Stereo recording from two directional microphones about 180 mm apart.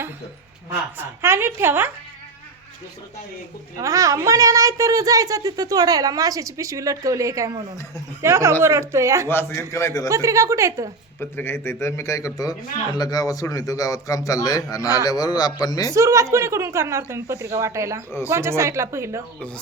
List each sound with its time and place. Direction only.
0.7 s a woman's voice: 15° right (ahead or behind)
3.8 s a woman's voice: 20° right (ahead or behind)
9.3 s a man's voice: 10° left (ahead or behind)
10.1 s a woman's voice: 15° right (ahead or behind)
11.2 s a man's voice: 10° left (ahead or behind)
15.9 s a woman's voice: 15° right (ahead or behind)